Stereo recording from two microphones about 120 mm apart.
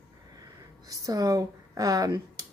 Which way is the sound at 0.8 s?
30° right (ahead or behind).